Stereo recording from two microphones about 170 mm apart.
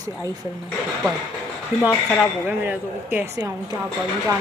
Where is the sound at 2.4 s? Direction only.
10° right (ahead or behind).